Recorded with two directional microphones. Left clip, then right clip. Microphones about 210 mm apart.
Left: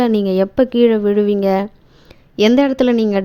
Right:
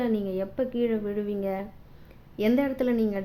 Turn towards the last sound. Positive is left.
turn(degrees=40)  # may be behind; listen again after turning